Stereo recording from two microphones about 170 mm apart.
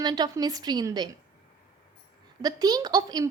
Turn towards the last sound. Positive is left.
turn(degrees=-20)  # may be behind; listen again after turning